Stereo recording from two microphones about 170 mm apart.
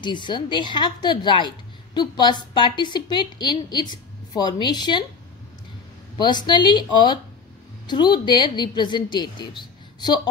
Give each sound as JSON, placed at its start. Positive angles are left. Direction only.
{"t": 0.0, "sound": "a woman's voice", "side_deg": 25}
{"t": 6.1, "sound": "a woman's voice", "side_deg": 25}